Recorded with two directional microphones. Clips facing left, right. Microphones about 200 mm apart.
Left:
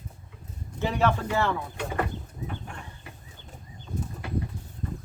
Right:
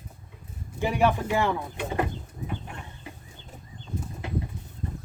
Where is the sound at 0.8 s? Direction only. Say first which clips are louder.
Right 1 dB; 15° right (ahead or behind).